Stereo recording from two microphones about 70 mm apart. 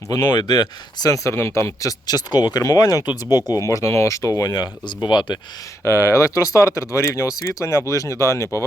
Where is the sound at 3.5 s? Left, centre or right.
Left.